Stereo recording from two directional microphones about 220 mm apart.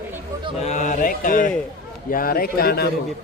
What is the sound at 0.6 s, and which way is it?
A man's voice, 35° left (ahead or behind).